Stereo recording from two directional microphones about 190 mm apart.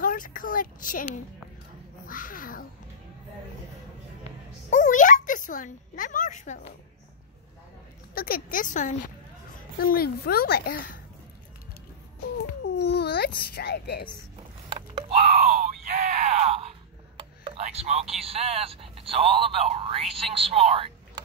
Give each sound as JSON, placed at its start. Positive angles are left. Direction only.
{"t": 0.0, "sound": "a woman's voice", "side_deg": 45}
{"t": 2.0, "sound": "speech", "side_deg": 45}
{"t": 4.6, "sound": "speech", "side_deg": 40}
{"t": 8.1, "sound": "speech", "side_deg": 50}
{"t": 9.8, "sound": "speech", "side_deg": 55}
{"t": 12.2, "sound": "speech", "side_deg": 60}
{"t": 14.7, "sound": "a sound", "side_deg": -30}
{"t": 16.0, "sound": "groan", "side_deg": -35}
{"t": 17.2, "sound": "speech", "side_deg": -30}